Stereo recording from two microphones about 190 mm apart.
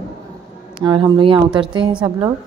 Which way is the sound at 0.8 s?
25° right (ahead or behind).